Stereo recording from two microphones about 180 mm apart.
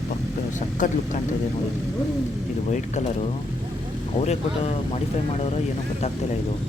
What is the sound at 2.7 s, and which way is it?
Speech, 40° left (ahead or behind).